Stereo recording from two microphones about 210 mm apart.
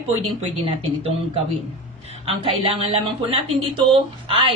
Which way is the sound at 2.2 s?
25° right (ahead or behind).